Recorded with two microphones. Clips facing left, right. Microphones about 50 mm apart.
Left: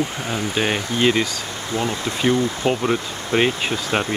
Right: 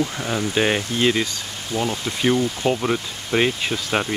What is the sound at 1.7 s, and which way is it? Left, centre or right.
Speech, left.